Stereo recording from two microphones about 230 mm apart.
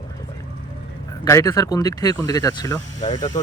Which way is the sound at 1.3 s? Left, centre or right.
Centre.